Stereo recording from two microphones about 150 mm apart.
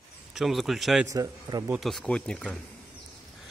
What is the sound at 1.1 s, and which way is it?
Speech, 25° right (ahead or behind).